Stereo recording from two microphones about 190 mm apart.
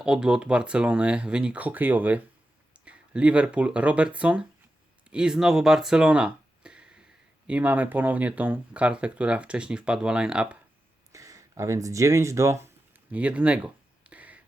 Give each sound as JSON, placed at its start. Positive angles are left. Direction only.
{"t": 0.0, "sound": "speech", "side_deg": -5}
{"t": 11.1, "sound": "speech", "side_deg": -15}
{"t": 14.0, "sound": "a sound", "side_deg": -5}